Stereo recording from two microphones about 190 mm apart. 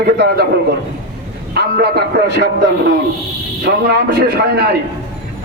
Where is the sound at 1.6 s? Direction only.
55° right (ahead or behind).